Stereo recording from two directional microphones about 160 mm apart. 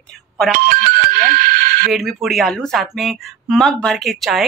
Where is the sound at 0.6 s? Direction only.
70° right (ahead or behind).